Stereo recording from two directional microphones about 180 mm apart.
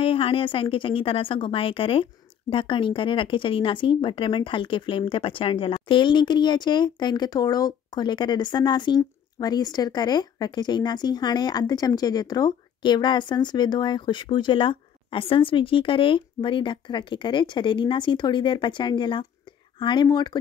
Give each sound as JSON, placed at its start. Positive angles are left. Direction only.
{"t": 0.0, "sound": "speech", "side_deg": 30}